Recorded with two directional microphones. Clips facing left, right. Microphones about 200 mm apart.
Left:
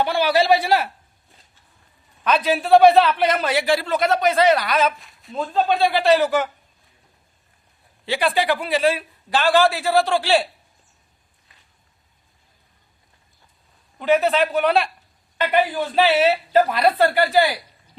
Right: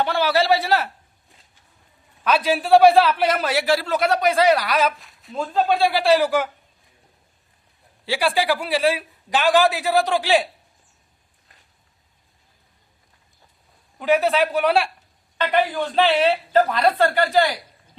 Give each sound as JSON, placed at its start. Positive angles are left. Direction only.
{"t": 0.0, "sound": "a woman's voice", "side_deg": 15}
{"t": 2.2, "sound": "a man's voice", "side_deg": -5}
{"t": 8.0, "sound": "a man's voice", "side_deg": -10}
{"t": 14.0, "sound": "a man's voice", "side_deg": -10}
{"t": 15.4, "sound": "a woman's voice", "side_deg": 10}